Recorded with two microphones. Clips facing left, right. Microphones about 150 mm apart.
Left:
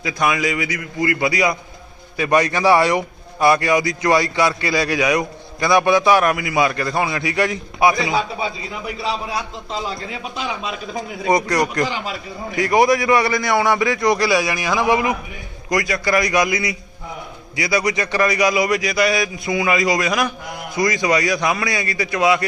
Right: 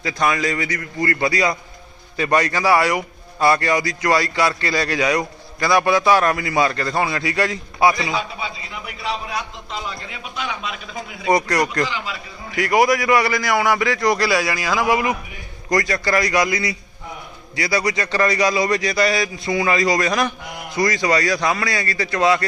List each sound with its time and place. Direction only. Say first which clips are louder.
0.0 s a man's voice: left 1 dB; 15° left (ahead or behind)
3.4 s a man's voice: left 2 dB; 15° left (ahead or behind)
9.0 s a man's voice: left 1 dB; 30° left (ahead or behind)
11.3 s a man's voice: even; 20° left (ahead or behind)
11.9 s a man's voice: left 3 dB; 40° left (ahead or behind)
12.5 s a man's voice: left 1 dB; 25° left (ahead or behind)